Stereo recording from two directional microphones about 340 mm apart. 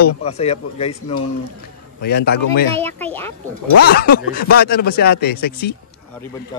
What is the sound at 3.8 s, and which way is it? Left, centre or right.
A man's voice, left.